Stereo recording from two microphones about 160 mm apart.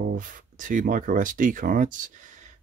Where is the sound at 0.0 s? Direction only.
60° right (ahead or behind).